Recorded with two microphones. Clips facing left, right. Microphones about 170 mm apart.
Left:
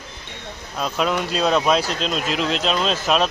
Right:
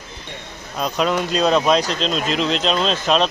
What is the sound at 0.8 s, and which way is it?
Speech, centre (ahead or behind).